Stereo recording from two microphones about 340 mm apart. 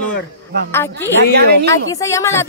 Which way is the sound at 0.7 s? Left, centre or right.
Centre.